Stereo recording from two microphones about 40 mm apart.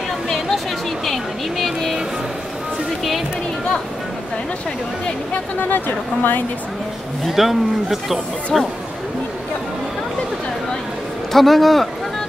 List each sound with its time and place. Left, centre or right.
1.0 s vehicle: centre
5.6 s a woman's voice: left
7.2 s speech: centre
11.3 s speech: centre